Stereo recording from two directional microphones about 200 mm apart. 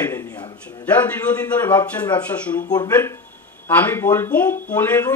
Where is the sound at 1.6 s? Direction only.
10° left (ahead or behind).